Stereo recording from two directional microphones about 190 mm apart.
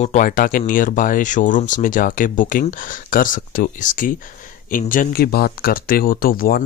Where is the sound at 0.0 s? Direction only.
40° left (ahead or behind).